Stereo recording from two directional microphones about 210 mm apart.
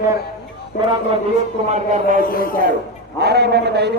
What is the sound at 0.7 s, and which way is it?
Speech, 40° left (ahead or behind).